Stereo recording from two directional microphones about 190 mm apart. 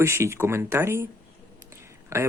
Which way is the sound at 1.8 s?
15° right (ahead or behind).